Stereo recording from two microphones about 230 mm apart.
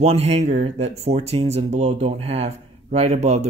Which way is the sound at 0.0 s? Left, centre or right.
Right.